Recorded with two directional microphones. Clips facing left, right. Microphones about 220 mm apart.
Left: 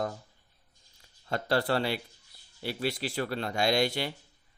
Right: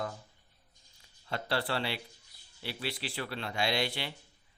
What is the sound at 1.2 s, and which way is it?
Speech, 45° left (ahead or behind).